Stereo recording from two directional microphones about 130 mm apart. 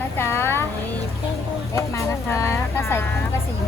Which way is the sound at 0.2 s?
15° left (ahead or behind).